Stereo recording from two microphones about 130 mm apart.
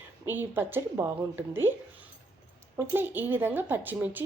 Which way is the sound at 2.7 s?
15° right (ahead or behind).